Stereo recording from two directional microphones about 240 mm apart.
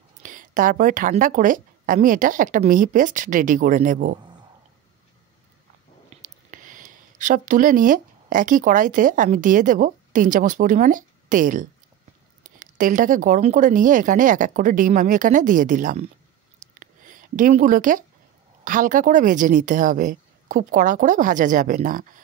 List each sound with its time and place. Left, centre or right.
0.2 s a woman's voice: right
6.5 s a woman's voice: right
16.8 s a sound: right
18.6 s a woman's voice: right